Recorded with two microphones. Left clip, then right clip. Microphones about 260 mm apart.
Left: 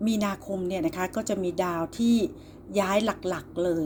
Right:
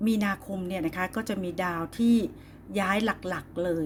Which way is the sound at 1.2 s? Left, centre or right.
Right.